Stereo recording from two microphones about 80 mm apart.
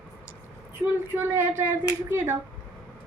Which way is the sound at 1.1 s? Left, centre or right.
Right.